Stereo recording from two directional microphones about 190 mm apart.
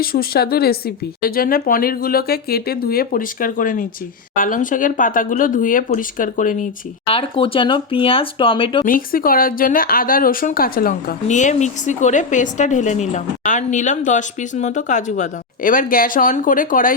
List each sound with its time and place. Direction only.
0.0 s a woman's voice: 50° left (ahead or behind)
7.1 s speech: 30° left (ahead or behind)
8.8 s a woman's voice: 45° left (ahead or behind)